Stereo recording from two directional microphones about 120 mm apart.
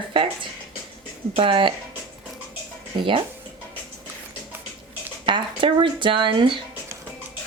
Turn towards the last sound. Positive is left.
turn(degrees=-45)  # may be behind; listen again after turning